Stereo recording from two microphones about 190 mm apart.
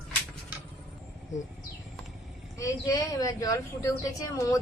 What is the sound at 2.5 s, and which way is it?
A woman's voice, 15° left (ahead or behind).